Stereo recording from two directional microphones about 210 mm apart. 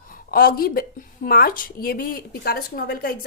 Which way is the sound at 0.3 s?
45° left (ahead or behind).